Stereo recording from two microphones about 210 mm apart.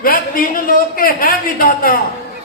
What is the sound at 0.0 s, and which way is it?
A man's voice, 45° left (ahead or behind).